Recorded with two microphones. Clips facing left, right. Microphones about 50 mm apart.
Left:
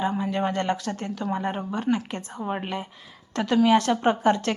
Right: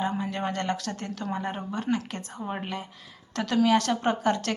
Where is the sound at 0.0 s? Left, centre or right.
Centre.